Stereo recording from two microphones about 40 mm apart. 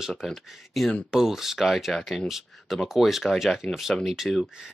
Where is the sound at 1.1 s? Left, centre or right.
Centre.